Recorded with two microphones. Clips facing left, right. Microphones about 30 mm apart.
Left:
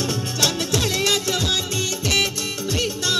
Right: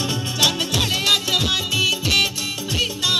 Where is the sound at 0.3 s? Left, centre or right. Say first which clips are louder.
Right 3 dB; right.